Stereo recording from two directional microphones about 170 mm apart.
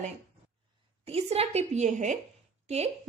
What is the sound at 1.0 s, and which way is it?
A woman's voice, 35° right (ahead or behind).